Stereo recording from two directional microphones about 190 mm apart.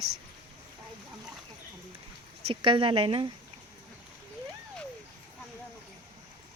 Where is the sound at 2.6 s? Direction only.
25° right (ahead or behind).